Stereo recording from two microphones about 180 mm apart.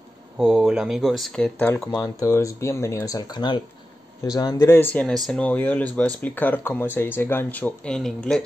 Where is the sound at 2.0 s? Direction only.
20° left (ahead or behind).